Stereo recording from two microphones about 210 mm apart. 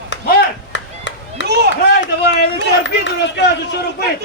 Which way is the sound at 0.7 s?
60° left (ahead or behind).